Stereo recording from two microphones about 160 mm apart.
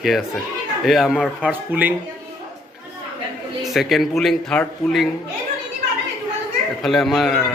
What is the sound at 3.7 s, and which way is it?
Speech, centre (ahead or behind).